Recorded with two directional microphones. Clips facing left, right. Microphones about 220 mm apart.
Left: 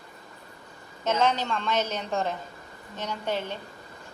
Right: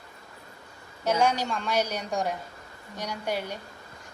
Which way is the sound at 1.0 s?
10° right (ahead or behind).